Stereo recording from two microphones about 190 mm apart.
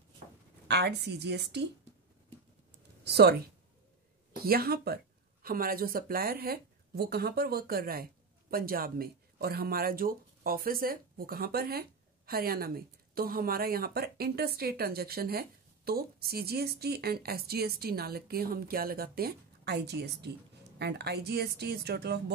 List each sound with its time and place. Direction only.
0.7 s speech: 60° right (ahead or behind)
3.0 s speech: 60° right (ahead or behind)
4.5 s speech: 55° right (ahead or behind)